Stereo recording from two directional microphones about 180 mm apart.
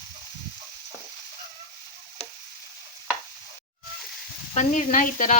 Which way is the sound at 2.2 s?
35° left (ahead or behind).